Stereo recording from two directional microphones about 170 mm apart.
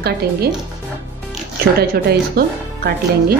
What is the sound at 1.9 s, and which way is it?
Speech, 65° right (ahead or behind).